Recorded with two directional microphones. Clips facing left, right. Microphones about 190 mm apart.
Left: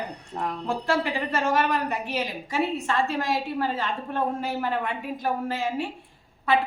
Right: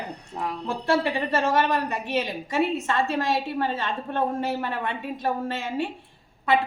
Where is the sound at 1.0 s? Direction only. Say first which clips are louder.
Right 2 dB; 25° right (ahead or behind).